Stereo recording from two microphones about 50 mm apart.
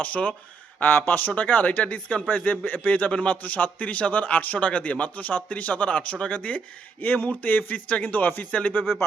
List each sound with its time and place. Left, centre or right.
0.0 s a man's voice: left